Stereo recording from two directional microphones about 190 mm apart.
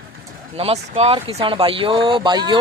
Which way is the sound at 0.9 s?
30° right (ahead or behind).